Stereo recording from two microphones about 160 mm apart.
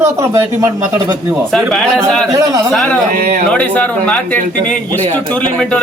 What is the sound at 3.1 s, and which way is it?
Speech, 65° right (ahead or behind).